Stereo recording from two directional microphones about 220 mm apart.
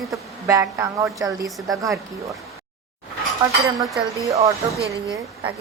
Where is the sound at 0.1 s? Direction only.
10° right (ahead or behind).